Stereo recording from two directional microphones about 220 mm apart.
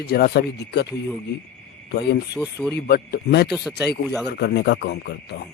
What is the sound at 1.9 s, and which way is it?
Speech, 50° left (ahead or behind).